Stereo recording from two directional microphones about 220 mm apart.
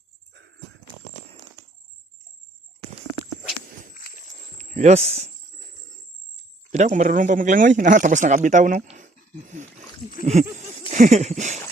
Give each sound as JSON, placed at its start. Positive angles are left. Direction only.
{"t": 3.9, "sound": "a sound", "side_deg": 40}
{"t": 4.5, "sound": "speech", "side_deg": -30}
{"t": 6.7, "sound": "speech", "side_deg": -30}
{"t": 10.9, "sound": "speech", "side_deg": -35}